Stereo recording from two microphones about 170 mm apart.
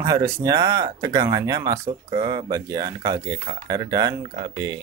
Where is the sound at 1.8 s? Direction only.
35° right (ahead or behind).